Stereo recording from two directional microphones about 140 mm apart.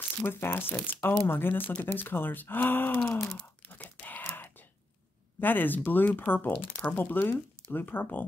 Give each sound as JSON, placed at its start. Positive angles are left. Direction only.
{"t": 0.2, "sound": "speech", "side_deg": 15}
{"t": 3.7, "sound": "a sound", "side_deg": 10}
{"t": 5.4, "sound": "speech", "side_deg": 15}